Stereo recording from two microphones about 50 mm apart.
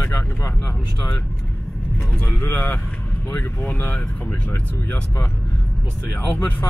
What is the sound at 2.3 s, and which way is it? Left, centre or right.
Speech, left.